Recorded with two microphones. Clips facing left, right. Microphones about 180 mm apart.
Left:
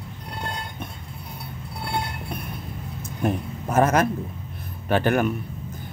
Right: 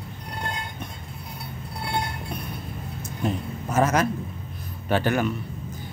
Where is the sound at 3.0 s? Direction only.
55° left (ahead or behind).